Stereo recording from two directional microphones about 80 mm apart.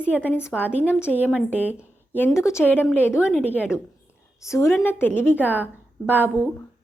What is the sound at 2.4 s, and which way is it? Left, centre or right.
Speech, left.